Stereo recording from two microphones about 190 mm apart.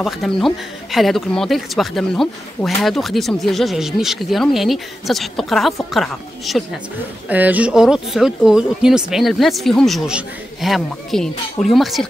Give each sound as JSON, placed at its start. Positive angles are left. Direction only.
{"t": 0.0, "sound": "speech", "side_deg": 0}